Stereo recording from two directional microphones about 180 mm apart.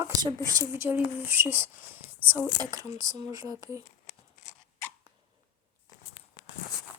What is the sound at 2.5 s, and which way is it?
Speech, 20° right (ahead or behind).